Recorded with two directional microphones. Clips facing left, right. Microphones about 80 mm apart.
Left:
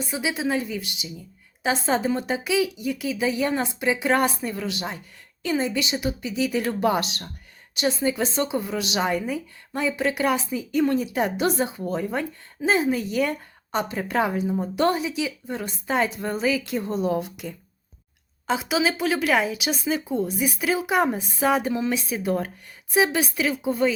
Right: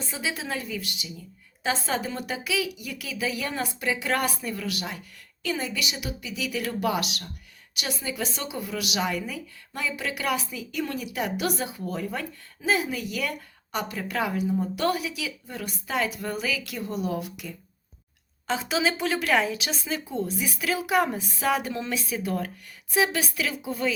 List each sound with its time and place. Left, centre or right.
0.0 s speech: centre
18.4 s speech: centre